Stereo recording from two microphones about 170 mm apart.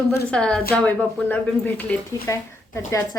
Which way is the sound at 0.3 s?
5° left (ahead or behind).